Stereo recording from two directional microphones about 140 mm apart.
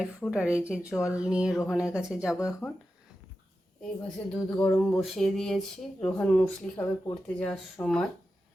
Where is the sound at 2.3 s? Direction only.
20° left (ahead or behind).